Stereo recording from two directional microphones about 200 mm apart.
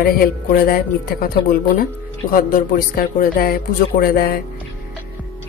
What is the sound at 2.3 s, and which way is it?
Speech, 45° left (ahead or behind).